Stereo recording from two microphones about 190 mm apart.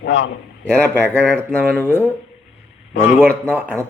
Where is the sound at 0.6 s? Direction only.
10° left (ahead or behind).